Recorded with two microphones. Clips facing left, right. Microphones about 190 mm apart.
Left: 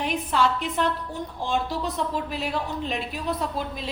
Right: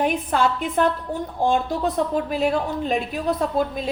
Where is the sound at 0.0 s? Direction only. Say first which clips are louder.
Right 3 dB; 50° right (ahead or behind).